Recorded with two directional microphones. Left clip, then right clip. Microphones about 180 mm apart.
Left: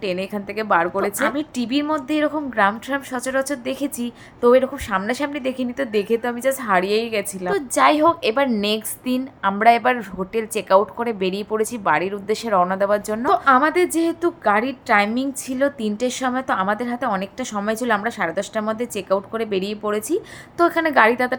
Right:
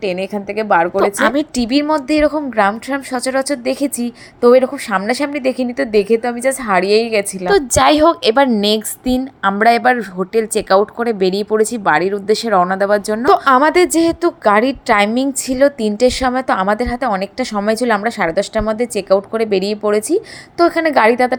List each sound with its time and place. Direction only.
0.0 s a woman's voice: 20° right (ahead or behind)
1.2 s a woman's voice: 40° right (ahead or behind); by 13.2 s 20° right (ahead or behind)
13.2 s a woman's voice: 45° right (ahead or behind); by 21.3 s 25° right (ahead or behind)